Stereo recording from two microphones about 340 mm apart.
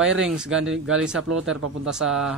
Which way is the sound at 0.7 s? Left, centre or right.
Right.